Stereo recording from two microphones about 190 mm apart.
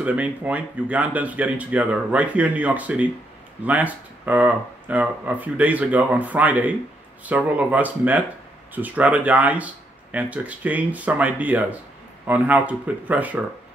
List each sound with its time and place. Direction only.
0.0 s speech: 10° right (ahead or behind)